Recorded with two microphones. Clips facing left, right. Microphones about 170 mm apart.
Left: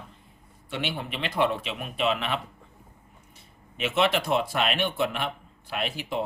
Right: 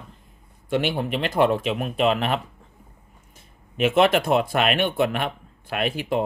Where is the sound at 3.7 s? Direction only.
50° right (ahead or behind).